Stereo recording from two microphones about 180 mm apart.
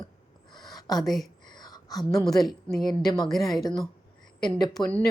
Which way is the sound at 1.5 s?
25° left (ahead or behind).